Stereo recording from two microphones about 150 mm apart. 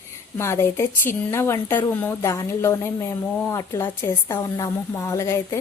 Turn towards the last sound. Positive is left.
turn(degrees=20)  # may be behind; listen again after turning